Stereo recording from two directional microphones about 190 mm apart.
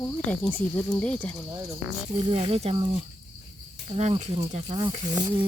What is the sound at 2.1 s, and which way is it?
Speech, 35° right (ahead or behind).